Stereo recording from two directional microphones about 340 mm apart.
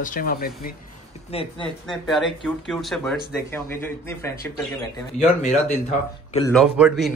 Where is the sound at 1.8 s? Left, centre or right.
Centre.